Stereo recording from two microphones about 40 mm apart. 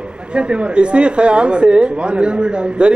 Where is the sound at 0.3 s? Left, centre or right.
Right.